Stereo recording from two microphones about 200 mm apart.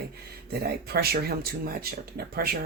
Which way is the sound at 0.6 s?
50° right (ahead or behind).